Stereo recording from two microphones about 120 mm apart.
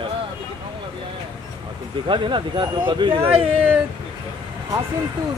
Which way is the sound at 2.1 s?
40° right (ahead or behind).